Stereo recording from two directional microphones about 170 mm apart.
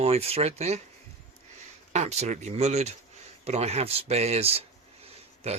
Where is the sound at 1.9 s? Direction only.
40° right (ahead or behind).